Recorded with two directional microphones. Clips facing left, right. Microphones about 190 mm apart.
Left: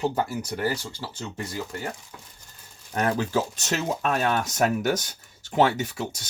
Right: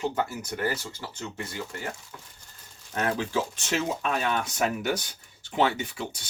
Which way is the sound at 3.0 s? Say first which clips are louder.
Left 3 dB; 40° left (ahead or behind).